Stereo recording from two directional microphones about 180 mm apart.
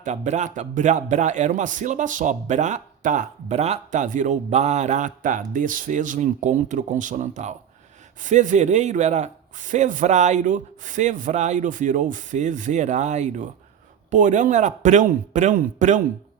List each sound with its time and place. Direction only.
0.0 s a man's voice: 40° right (ahead or behind)